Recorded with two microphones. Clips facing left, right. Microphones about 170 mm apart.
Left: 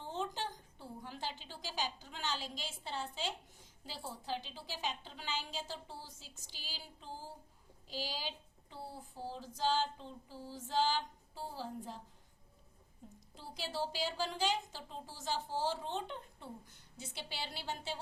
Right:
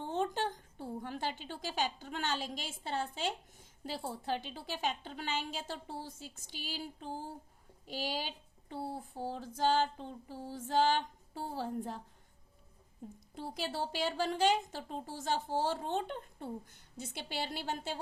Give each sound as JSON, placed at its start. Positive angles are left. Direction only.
{"t": 0.0, "sound": "a woman's voice", "side_deg": -55}
{"t": 13.3, "sound": "a woman's voice", "side_deg": -60}